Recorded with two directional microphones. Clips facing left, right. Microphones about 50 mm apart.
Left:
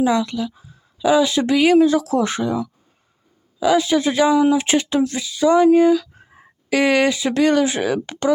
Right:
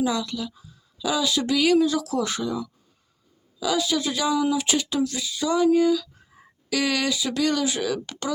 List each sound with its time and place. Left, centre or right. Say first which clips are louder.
0.0 s speech: left 7 dB; left